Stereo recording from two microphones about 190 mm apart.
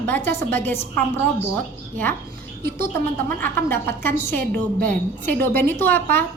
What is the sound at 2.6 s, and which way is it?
Speech, 50° right (ahead or behind).